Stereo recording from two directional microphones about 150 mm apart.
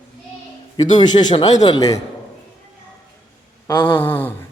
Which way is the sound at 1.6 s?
30° left (ahead or behind).